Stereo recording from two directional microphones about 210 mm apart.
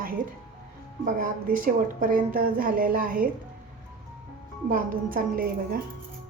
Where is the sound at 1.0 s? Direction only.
40° right (ahead or behind).